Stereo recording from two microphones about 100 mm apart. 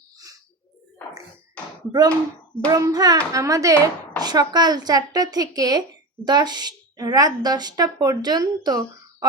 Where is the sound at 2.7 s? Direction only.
40° right (ahead or behind).